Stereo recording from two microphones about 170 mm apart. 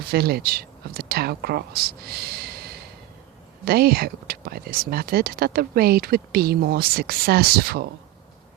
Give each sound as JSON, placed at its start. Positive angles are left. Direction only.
{"t": 0.0, "sound": "speech", "side_deg": -65}